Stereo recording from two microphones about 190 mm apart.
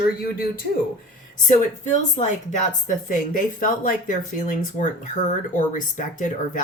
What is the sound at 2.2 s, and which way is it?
Speech, 40° left (ahead or behind).